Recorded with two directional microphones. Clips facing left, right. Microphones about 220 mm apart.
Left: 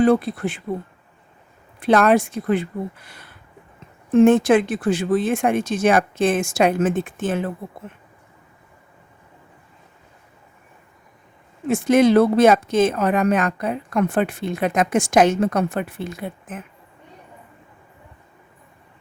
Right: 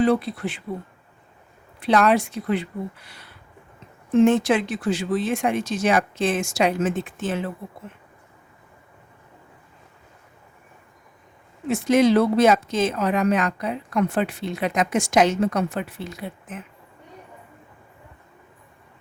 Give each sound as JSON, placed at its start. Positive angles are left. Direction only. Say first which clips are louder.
{"t": 0.0, "sound": "speech", "louder": "left 3 dB", "side_deg": 50}
{"t": 1.8, "sound": "speech", "louder": "left 3 dB", "side_deg": 50}
{"t": 11.7, "sound": "speech", "louder": "left 3 dB", "side_deg": 50}